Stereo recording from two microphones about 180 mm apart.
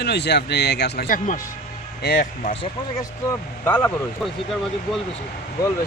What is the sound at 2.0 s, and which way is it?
Speech, 60° left (ahead or behind).